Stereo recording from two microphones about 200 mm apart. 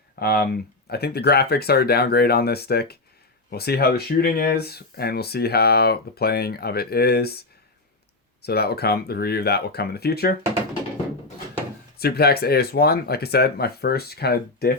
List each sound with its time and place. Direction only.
0.2 s speech: 50° left (ahead or behind)
11.9 s speech: 50° left (ahead or behind)